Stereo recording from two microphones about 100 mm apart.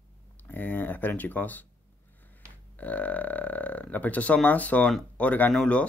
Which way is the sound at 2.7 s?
15° left (ahead or behind).